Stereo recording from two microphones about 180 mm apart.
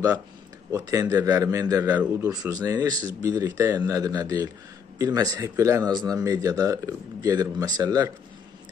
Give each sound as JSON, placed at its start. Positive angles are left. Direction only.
{"t": 0.7, "sound": "a man's voice", "side_deg": -20}